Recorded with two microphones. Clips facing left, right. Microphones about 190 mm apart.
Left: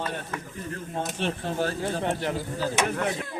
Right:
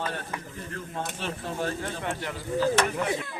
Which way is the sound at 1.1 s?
25° left (ahead or behind).